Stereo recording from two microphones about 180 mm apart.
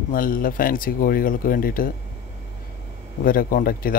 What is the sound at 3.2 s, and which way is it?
Speech, 50° left (ahead or behind).